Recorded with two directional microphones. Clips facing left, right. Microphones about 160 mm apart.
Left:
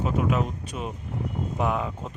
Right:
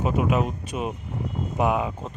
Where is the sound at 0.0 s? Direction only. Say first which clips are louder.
Right 2 dB; 15° right (ahead or behind).